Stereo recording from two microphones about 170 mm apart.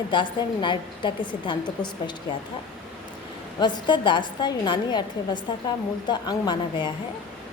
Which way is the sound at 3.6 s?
30° left (ahead or behind).